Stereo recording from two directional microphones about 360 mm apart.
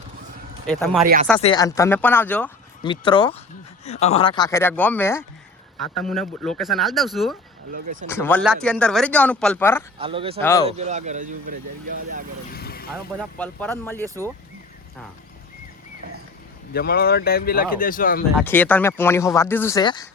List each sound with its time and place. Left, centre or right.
0.7 s speech: centre
1.0 s speech: right
1.4 s speech: centre
7.7 s speech: right
8.0 s speech: centre
10.0 s speech: centre
10.4 s speech: centre
10.7 s speech: centre
12.5 s vehicle: left
13.1 s speech: centre
16.7 s speech: left
18.3 s speech: centre